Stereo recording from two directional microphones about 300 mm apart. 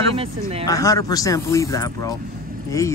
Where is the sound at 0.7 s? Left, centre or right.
Centre.